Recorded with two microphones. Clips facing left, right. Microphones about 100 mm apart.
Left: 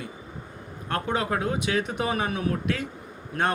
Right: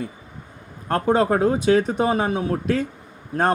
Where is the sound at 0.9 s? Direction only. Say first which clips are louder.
Right 8 dB; 35° right (ahead or behind).